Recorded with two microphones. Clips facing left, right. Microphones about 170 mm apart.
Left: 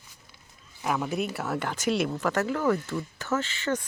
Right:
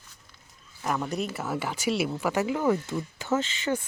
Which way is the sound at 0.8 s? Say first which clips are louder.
Left 1 dB; 5° left (ahead or behind).